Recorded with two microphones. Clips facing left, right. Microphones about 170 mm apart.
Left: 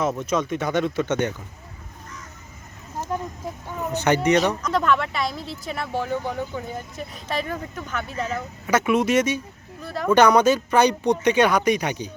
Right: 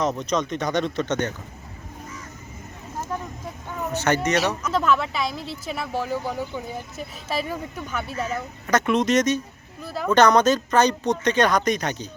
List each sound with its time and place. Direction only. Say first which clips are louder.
0.0 s speech: even; 5° left (ahead or behind)
3.9 s speech: left 3 dB; 15° left (ahead or behind)
4.6 s speech: even; 5° right (ahead or behind)
8.6 s speech: left 1 dB; 10° left (ahead or behind)
9.8 s speech: left 1 dB; centre (ahead or behind)
10.1 s speech: left 1 dB; 10° left (ahead or behind)